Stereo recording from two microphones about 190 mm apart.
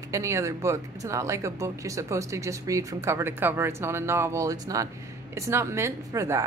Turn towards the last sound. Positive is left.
turn(degrees=-15)  # may be behind; listen again after turning